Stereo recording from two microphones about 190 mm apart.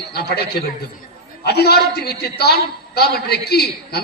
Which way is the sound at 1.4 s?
55° left (ahead or behind).